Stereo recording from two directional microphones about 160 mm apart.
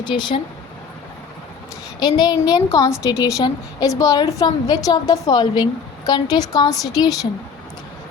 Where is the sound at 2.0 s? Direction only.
25° left (ahead or behind).